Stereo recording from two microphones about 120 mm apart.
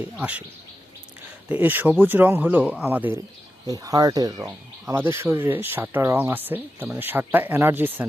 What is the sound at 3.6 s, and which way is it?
Speech, 30° right (ahead or behind).